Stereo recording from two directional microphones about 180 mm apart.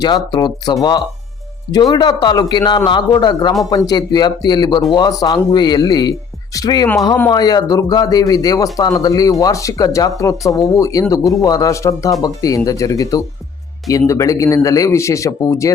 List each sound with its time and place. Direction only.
0.0 s a man's voice: 25° left (ahead or behind)